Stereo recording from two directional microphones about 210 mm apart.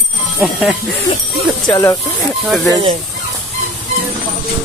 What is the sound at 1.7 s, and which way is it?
Speech, 15° left (ahead or behind).